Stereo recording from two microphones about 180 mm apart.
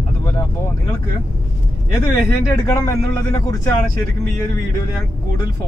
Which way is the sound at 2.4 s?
15° left (ahead or behind).